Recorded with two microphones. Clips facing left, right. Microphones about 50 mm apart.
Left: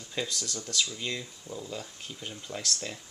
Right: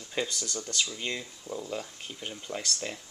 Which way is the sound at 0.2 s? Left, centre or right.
Centre.